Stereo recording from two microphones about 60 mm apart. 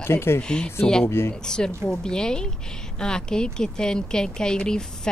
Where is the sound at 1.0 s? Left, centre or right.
Left.